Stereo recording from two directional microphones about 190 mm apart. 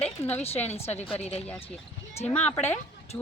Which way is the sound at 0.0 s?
10° left (ahead or behind).